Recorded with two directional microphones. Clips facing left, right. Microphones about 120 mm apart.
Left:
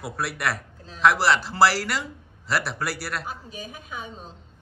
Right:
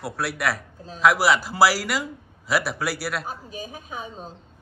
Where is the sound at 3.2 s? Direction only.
40° right (ahead or behind).